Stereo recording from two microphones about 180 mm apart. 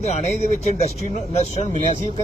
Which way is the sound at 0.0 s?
35° left (ahead or behind).